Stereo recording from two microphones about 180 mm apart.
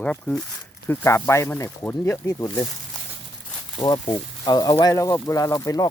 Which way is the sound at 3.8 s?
20° left (ahead or behind).